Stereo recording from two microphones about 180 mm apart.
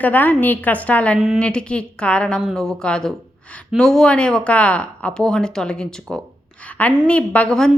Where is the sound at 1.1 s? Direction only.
5° right (ahead or behind).